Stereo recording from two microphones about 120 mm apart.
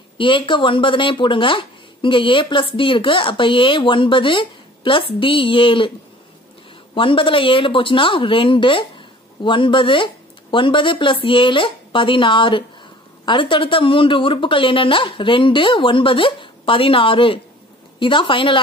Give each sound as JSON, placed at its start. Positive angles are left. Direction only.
{"t": 0.2, "sound": "speech", "side_deg": 45}
{"t": 7.0, "sound": "speech", "side_deg": 45}